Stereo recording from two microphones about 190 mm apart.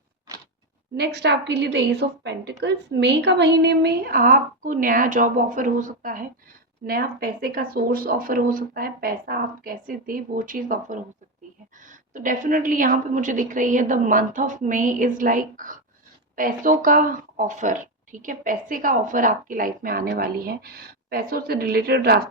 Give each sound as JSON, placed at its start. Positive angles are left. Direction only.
{"t": 0.9, "sound": "a woman's voice", "side_deg": -60}